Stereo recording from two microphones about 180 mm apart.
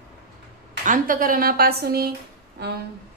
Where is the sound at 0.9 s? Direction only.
50° right (ahead or behind).